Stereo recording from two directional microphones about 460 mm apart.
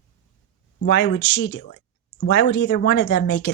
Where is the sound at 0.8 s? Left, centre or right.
Left.